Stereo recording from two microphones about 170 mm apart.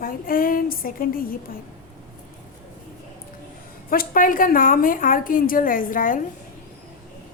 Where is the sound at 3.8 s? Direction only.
55° left (ahead or behind).